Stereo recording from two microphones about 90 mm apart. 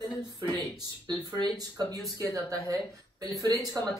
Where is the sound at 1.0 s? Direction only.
50° right (ahead or behind).